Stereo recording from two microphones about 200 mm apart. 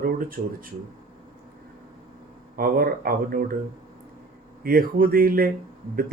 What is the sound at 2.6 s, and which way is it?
Speech, 45° right (ahead or behind).